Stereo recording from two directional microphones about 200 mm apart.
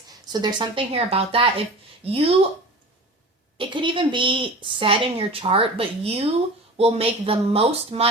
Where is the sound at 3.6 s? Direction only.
25° right (ahead or behind).